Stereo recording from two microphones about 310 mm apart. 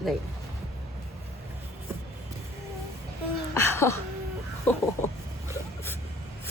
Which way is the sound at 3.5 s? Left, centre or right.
Centre.